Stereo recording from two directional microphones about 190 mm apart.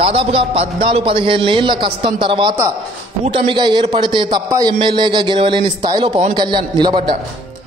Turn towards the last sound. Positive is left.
turn(degrees=-25)  # may be behind; listen again after turning